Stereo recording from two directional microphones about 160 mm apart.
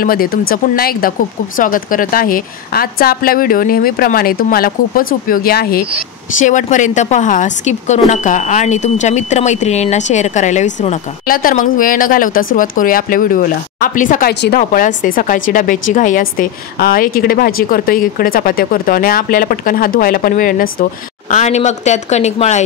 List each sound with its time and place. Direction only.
0.0 s speech: 65° left (ahead or behind)
1.6 s speech: 60° left (ahead or behind)
6.4 s speech: 50° left (ahead or behind)
21.3 s speech: 45° left (ahead or behind)